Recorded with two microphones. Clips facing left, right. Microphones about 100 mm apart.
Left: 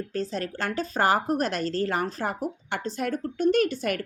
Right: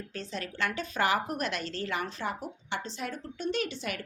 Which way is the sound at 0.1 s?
40° left (ahead or behind).